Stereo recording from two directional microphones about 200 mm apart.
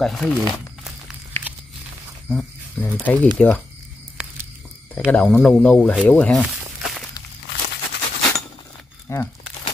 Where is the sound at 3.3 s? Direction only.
Centre (ahead or behind).